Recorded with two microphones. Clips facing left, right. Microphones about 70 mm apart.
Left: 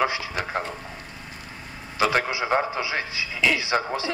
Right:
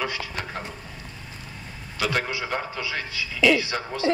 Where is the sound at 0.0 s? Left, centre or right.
Left.